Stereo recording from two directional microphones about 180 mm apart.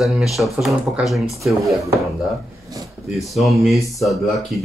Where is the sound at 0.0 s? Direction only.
Centre (ahead or behind).